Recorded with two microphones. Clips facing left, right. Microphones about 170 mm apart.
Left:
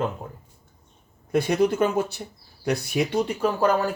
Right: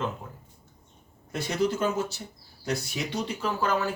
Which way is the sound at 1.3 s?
60° left (ahead or behind).